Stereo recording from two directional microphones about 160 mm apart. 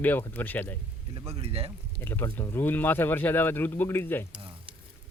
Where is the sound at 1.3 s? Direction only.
40° right (ahead or behind).